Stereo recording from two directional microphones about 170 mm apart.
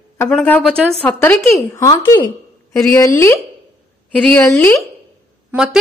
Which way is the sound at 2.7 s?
5° left (ahead or behind).